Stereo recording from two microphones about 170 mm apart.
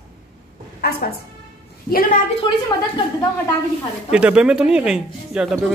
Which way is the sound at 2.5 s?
25° left (ahead or behind).